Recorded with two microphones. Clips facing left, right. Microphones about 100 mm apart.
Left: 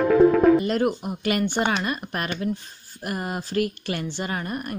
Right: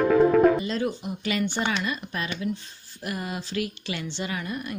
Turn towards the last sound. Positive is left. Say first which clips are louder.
# left 5 dB
turn(degrees=50)  # may be behind; listen again after turning